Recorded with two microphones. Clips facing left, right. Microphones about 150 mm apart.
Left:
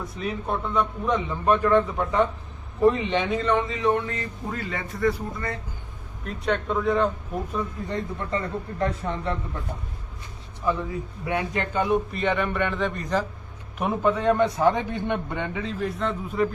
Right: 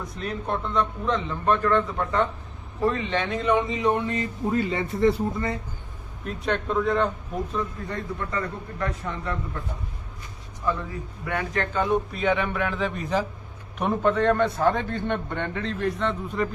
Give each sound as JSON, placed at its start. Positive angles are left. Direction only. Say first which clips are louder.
{"t": 0.2, "sound": "a man's voice", "louder": "left 1 dB", "side_deg": 0}
{"t": 3.4, "sound": "a man's voice", "louder": "right 1 dB", "side_deg": -15}
{"t": 6.2, "sound": "a man's voice", "louder": "left 1 dB", "side_deg": 0}
{"t": 7.5, "sound": "a man's voice", "louder": "left 1 dB", "side_deg": 20}
{"t": 10.7, "sound": "a man's voice", "louder": "left 2 dB", "side_deg": 15}
{"t": 12.1, "sound": "a man's voice", "louder": "even", "side_deg": 0}